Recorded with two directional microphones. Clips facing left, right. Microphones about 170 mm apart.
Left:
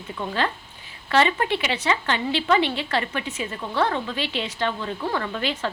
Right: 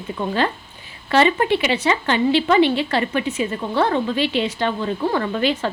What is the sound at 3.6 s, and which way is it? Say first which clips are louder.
Speech: right 4 dB; 30° right (ahead or behind).